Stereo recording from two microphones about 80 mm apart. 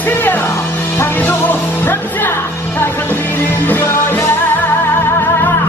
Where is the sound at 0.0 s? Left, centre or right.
Left.